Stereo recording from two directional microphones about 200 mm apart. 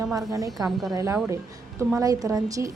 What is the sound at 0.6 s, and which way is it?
Speech, centre (ahead or behind).